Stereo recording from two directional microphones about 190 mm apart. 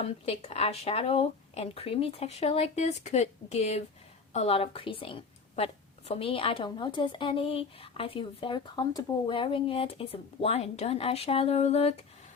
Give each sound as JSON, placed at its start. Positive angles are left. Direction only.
{"t": 0.0, "sound": "a woman's voice", "side_deg": 30}